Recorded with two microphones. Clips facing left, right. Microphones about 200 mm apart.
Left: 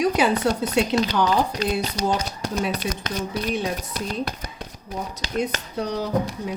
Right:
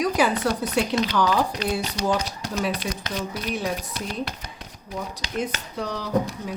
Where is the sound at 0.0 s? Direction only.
25° left (ahead or behind).